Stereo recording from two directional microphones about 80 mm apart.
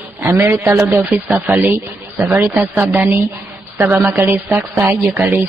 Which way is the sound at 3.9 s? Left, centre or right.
Right.